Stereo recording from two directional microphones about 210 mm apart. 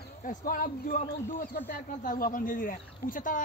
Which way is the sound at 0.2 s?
40° left (ahead or behind).